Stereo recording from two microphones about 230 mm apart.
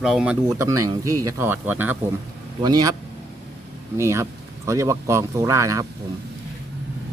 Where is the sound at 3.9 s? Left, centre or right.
Centre.